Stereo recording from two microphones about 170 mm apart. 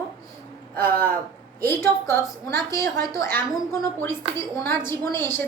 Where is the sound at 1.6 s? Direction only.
15° left (ahead or behind).